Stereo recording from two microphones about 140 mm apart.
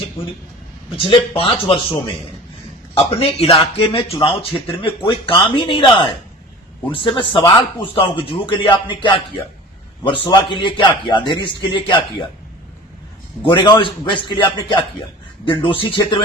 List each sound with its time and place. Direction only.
0.9 s speech: 40° left (ahead or behind)
13.4 s speech: 35° left (ahead or behind)
15.8 s speech: 35° left (ahead or behind)